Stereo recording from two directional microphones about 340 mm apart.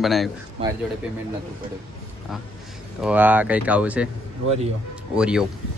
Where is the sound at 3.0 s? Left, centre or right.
Centre.